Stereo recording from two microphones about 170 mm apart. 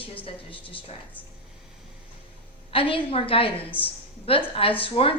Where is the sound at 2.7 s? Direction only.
30° left (ahead or behind).